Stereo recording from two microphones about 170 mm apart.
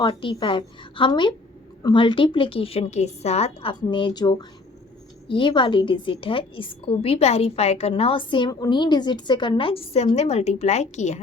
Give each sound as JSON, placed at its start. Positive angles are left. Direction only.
{"t": 0.0, "sound": "a woman's voice", "side_deg": 30}